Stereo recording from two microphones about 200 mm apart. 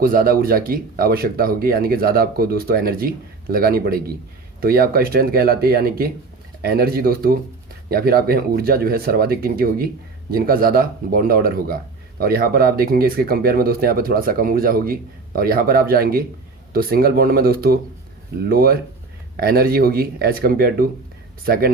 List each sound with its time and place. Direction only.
0.0 s speech: 45° right (ahead or behind)